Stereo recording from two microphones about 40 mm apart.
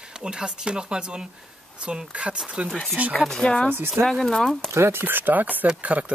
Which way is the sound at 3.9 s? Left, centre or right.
Centre.